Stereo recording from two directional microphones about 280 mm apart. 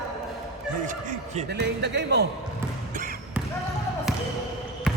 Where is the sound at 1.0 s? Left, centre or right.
Right.